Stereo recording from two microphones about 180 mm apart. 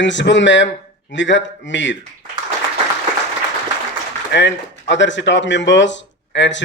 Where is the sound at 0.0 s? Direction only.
85° left.